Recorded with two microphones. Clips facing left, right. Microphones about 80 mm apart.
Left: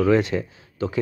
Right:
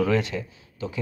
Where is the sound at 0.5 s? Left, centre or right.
Left.